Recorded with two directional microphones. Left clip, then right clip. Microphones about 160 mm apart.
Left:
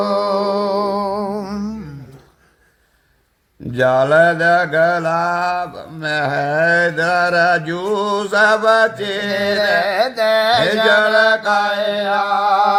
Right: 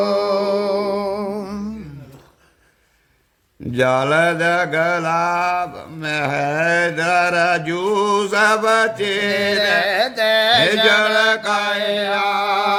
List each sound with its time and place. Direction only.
0.3 s music: 10° left (ahead or behind)
3.7 s mantra: 20° right (ahead or behind)
9.3 s carnatic music: 15° left (ahead or behind)
10.8 s mantra: 20° right (ahead or behind)